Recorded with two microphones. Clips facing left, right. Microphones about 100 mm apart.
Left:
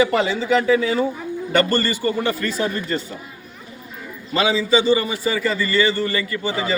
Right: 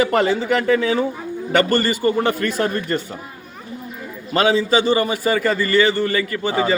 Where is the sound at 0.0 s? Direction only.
55° right (ahead or behind).